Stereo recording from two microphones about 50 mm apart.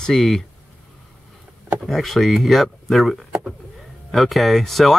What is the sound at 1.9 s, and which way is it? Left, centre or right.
Speech, centre.